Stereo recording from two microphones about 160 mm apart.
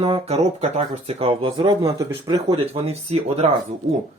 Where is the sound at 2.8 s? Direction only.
40° right (ahead or behind).